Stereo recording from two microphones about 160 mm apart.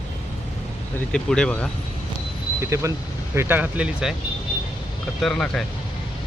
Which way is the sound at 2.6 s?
20° right (ahead or behind).